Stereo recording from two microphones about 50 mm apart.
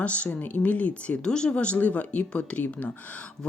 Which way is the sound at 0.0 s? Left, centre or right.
Left.